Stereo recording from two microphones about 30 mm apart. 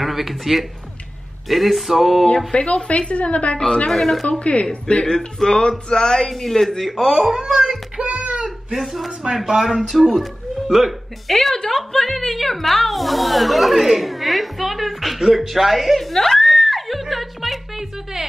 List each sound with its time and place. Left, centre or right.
0.0 s a woman's voice: centre
2.2 s a woman's voice: left
3.6 s speech: left
3.9 s speech: centre
4.3 s speech: left
5.0 s speech: centre
6.3 s speech: centre
7.1 s speech: centre
8.0 s a sound: right
8.7 s a woman's voice: centre
11.2 s a woman's voice: centre
15.1 s screaming: centre